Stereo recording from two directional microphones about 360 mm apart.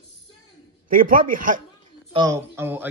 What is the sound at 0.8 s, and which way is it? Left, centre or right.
Speech, right.